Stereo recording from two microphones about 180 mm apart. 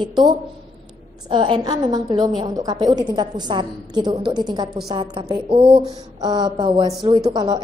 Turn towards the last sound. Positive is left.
turn(degrees=-25)  # may be behind; listen again after turning